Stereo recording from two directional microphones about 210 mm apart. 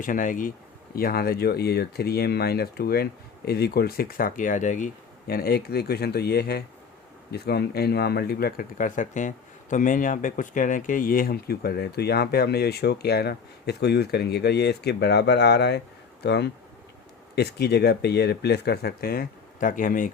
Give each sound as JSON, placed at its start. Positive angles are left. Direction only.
{"t": 0.0, "sound": "speech", "side_deg": 40}
{"t": 5.3, "sound": "speech", "side_deg": 45}